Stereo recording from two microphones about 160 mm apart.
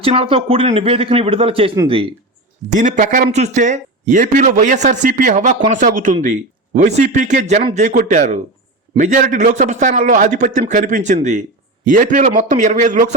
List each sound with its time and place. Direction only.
0.0 s a man's voice: 35° right (ahead or behind)
2.6 s speech: 50° right (ahead or behind)